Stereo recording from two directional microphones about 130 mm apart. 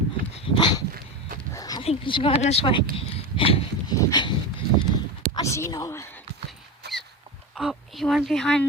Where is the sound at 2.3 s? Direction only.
60° left (ahead or behind).